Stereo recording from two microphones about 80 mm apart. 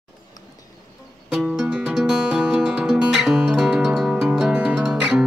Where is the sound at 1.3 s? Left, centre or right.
Centre.